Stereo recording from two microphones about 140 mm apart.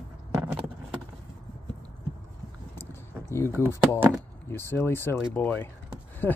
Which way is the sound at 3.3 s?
20° left (ahead or behind).